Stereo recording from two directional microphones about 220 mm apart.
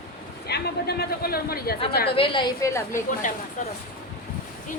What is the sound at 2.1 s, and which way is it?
Speech, 25° left (ahead or behind).